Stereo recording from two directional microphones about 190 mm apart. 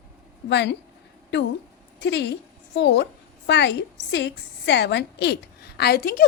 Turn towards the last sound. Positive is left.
turn(degrees=50)  # may be behind; listen again after turning